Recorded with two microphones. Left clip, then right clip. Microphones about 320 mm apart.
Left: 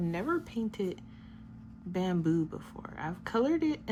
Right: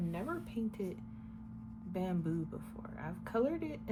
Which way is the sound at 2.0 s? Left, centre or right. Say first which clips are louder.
Left 8 dB; left.